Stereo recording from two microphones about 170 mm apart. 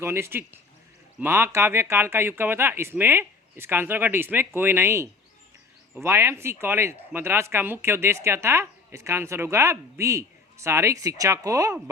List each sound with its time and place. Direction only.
0.0 s speech: 15° right (ahead or behind)